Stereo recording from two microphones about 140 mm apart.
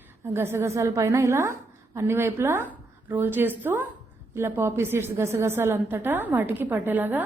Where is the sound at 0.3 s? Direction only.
20° right (ahead or behind).